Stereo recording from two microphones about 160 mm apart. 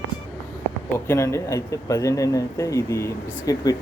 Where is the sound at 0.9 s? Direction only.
20° left (ahead or behind).